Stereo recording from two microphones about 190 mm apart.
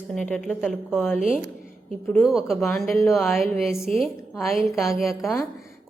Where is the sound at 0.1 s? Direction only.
5° left (ahead or behind).